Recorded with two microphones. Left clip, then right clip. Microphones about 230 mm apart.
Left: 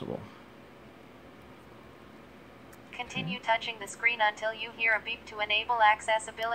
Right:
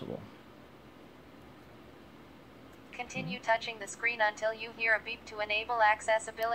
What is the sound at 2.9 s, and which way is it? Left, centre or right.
A woman's voice, centre.